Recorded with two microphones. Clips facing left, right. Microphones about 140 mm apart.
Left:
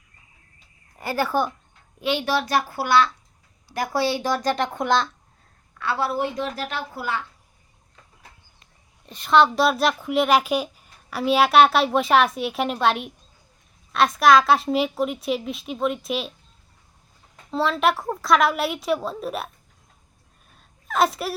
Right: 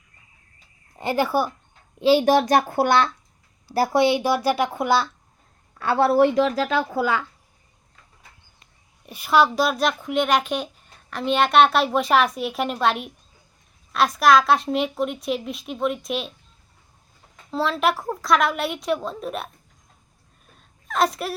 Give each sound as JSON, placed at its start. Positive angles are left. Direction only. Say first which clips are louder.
{"t": 0.9, "sound": "speech", "louder": "right 2 dB", "side_deg": -20}
{"t": 2.0, "sound": "a child's voice", "louder": "right 8 dB", "side_deg": -35}
{"t": 2.2, "sound": "speech", "louder": "right 6 dB", "side_deg": -45}
{"t": 3.9, "sound": "speech", "louder": "right 3 dB", "side_deg": -15}
{"t": 5.8, "sound": "speech", "louder": "right 5 dB", "side_deg": -45}
{"t": 6.1, "sound": "speech", "louder": "right 9 dB", "side_deg": -65}
{"t": 9.0, "sound": "a woman's voice", "louder": "left 1 dB", "side_deg": -5}
{"t": 17.5, "sound": "a woman's voice", "louder": "left 1 dB", "side_deg": 0}
{"t": 20.6, "sound": "a sound", "louder": "left 1 dB", "side_deg": 0}